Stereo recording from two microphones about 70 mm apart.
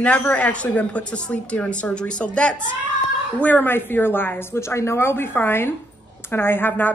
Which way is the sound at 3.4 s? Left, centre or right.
Left.